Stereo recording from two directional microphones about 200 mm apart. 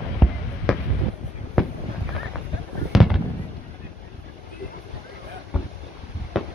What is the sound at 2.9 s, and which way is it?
Fireworks, centre (ahead or behind).